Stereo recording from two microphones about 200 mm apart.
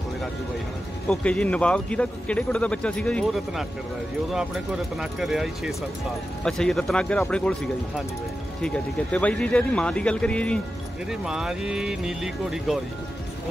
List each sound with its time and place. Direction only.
1.0 s speech: 5° left (ahead or behind)
5.2 s speech: centre (ahead or behind)